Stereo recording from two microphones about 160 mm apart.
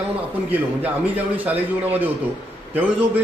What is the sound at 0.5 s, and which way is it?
A man's voice, 10° right (ahead or behind).